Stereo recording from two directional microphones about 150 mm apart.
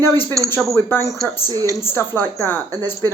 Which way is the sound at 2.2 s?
15° left (ahead or behind).